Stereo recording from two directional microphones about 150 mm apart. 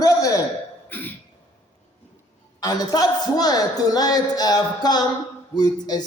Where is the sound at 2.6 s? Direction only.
25° left (ahead or behind).